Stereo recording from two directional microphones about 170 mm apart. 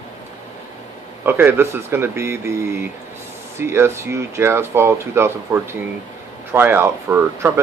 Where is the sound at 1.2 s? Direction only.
10° right (ahead or behind).